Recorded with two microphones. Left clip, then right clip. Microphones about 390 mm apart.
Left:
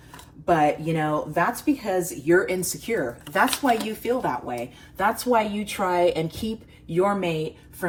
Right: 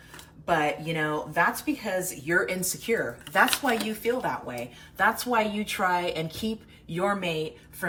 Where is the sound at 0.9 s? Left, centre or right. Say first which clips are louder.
Left 2 dB; centre.